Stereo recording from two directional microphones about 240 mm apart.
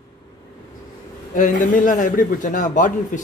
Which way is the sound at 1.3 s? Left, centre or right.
Left.